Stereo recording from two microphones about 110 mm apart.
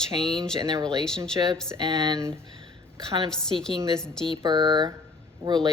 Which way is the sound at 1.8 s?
40° right (ahead or behind).